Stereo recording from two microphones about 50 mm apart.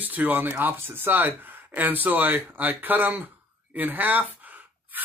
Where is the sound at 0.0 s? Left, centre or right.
Right.